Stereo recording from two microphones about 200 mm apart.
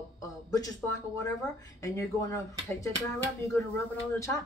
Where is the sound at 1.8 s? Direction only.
15° left (ahead or behind).